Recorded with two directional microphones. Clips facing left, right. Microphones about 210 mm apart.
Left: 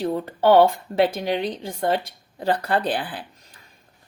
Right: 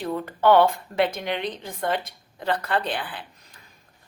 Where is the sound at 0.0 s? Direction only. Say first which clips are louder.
Left 2 dB; 30° left (ahead or behind).